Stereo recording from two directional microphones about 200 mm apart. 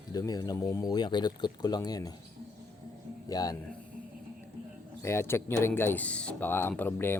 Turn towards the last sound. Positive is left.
turn(degrees=10)  # may be behind; listen again after turning